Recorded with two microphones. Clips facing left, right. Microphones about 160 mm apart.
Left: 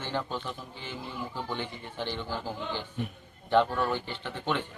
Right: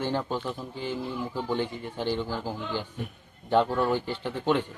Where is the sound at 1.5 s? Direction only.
40° right (ahead or behind).